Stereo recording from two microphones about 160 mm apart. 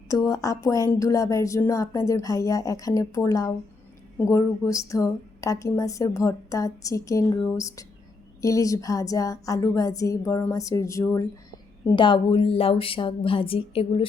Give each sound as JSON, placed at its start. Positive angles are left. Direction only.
{"t": 0.1, "sound": "a woman's voice", "side_deg": 20}
{"t": 11.9, "sound": "a woman's voice", "side_deg": 30}